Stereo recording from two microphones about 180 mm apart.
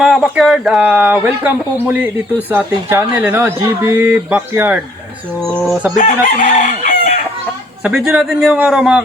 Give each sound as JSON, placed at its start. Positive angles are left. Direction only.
{"t": 0.0, "sound": "speech", "side_deg": 0}
{"t": 5.4, "sound": "a man's voice", "side_deg": 0}
{"t": 6.0, "sound": "chicken", "side_deg": 45}
{"t": 7.9, "sound": "a man's voice", "side_deg": 0}